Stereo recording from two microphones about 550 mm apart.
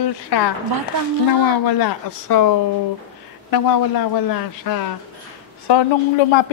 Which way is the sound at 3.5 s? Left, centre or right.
Left.